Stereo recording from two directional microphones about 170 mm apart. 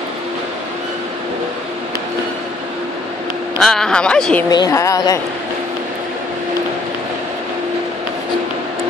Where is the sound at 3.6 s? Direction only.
5° left (ahead or behind).